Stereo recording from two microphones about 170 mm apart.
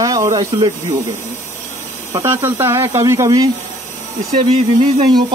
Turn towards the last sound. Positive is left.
turn(degrees=-40)  # may be behind; listen again after turning